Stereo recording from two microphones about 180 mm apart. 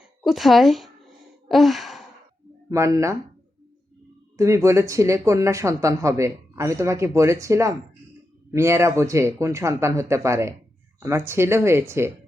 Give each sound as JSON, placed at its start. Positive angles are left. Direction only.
{"t": 0.2, "sound": "a sound", "side_deg": 0}
{"t": 2.6, "sound": "speech", "side_deg": -15}
{"t": 4.4, "sound": "speech", "side_deg": -15}